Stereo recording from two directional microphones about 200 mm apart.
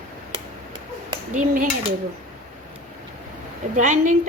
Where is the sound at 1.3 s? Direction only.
40° right (ahead or behind).